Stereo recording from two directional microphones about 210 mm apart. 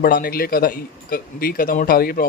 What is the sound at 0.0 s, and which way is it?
Speech, 45° left (ahead or behind).